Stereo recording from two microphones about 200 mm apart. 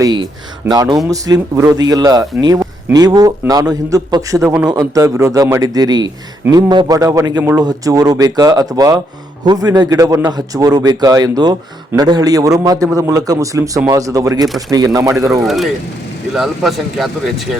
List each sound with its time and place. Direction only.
0.0 s a man's voice: 20° right (ahead or behind)
15.3 s speech: centre (ahead or behind)